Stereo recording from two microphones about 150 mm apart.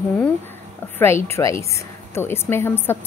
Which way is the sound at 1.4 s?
20° left (ahead or behind).